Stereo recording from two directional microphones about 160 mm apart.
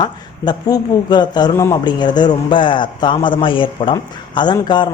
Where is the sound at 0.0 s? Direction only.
25° left (ahead or behind).